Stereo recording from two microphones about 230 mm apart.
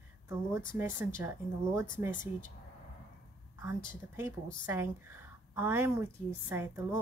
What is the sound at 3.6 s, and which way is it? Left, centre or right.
A woman's voice, centre.